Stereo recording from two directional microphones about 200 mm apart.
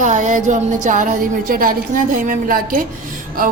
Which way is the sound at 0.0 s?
35° right (ahead or behind).